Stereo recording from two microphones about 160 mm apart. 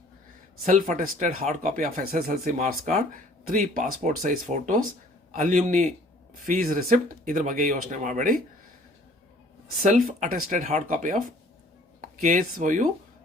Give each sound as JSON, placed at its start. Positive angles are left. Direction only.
{"t": 0.6, "sound": "speech", "side_deg": -55}
{"t": 9.8, "sound": "speech", "side_deg": -55}